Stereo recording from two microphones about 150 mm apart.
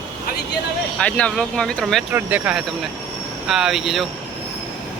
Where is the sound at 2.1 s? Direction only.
10° right (ahead or behind).